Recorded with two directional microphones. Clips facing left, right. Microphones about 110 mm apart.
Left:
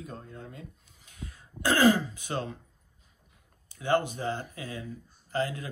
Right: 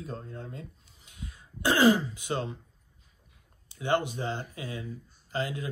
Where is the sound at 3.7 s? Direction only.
20° right (ahead or behind).